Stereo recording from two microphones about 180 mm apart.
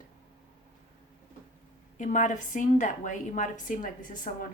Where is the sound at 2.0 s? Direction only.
45° left (ahead or behind).